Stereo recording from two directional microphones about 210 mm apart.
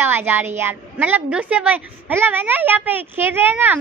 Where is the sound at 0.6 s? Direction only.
10° right (ahead or behind).